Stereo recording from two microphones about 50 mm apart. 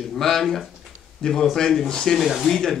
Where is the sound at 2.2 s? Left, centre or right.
Centre.